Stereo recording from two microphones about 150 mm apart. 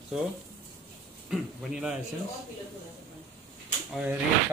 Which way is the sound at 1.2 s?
5° right (ahead or behind).